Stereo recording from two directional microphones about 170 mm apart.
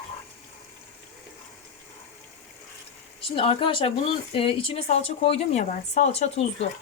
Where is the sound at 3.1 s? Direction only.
30° left (ahead or behind).